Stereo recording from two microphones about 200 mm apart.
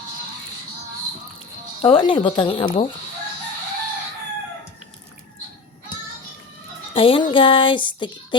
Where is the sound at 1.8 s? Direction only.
25° left (ahead or behind).